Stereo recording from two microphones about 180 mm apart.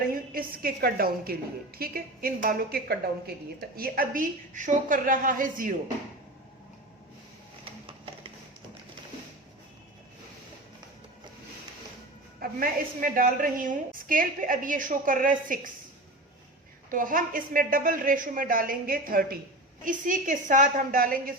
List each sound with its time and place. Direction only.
0.1 s a woman's voice: 55° right (ahead or behind)
12.4 s a woman's voice: 55° right (ahead or behind)
16.9 s a woman's voice: 50° right (ahead or behind)